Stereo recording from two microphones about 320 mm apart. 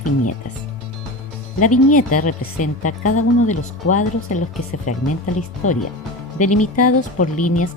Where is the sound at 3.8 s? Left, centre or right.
Left.